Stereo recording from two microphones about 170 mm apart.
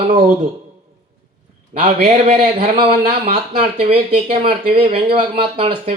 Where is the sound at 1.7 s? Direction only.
45° right (ahead or behind).